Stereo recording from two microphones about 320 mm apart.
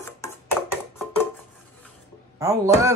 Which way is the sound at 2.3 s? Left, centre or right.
Centre.